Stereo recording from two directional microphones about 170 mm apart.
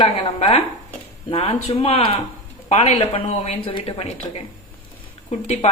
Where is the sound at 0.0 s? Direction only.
30° left (ahead or behind).